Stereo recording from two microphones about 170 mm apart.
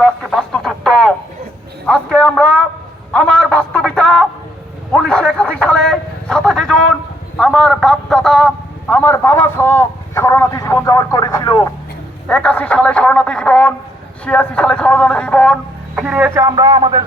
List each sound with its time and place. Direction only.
0.0 s radio: centre (ahead or behind)
1.9 s a man's voice: 5° left (ahead or behind)
3.1 s a sound: 5° left (ahead or behind)
7.3 s a man's voice: 5° left (ahead or behind); by 11.7 s 20° left (ahead or behind)
12.3 s a sound: 5° left (ahead or behind)
16.0 s speech: 5° right (ahead or behind)
16.4 s speech: 20° right (ahead or behind)